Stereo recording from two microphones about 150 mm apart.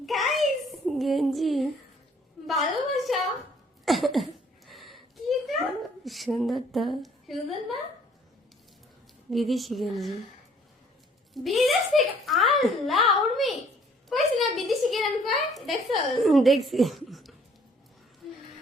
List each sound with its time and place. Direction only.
0.0 s a sound: centre (ahead or behind)
2.5 s a woman's voice: centre (ahead or behind)
3.8 s a sound: centre (ahead or behind)
6.1 s a woman's voice: centre (ahead or behind)
9.3 s a woman's voice: centre (ahead or behind)
11.3 s a woman's voice: centre (ahead or behind)